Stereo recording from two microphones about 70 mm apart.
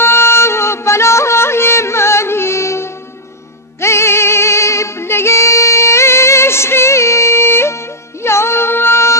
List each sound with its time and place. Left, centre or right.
0.0 s music: left